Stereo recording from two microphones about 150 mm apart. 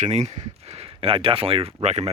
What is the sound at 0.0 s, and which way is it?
Speech, 50° right (ahead or behind).